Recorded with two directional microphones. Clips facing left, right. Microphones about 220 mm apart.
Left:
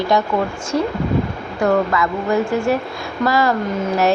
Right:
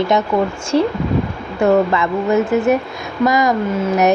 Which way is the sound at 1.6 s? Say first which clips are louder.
Right 3 dB; 25° right (ahead or behind).